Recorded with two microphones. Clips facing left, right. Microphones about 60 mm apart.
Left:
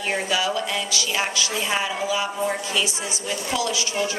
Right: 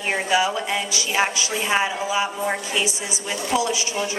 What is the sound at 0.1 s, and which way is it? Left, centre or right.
A woman's voice, right.